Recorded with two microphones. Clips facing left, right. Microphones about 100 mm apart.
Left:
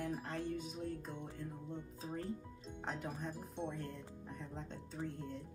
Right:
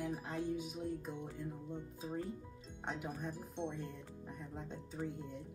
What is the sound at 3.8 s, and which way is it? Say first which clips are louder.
Speech: even; 10° right (ahead or behind).